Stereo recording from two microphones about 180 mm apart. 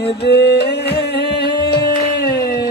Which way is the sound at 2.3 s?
20° left (ahead or behind).